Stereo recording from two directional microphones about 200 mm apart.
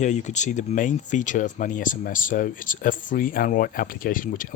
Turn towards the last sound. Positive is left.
turn(degrees=45)  # may be behind; listen again after turning